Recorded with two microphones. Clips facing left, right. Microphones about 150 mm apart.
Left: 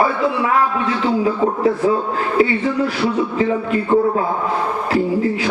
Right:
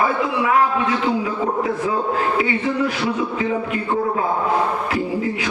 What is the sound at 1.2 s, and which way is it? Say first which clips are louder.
A man's voice: left 5 dB; 35° left (ahead or behind).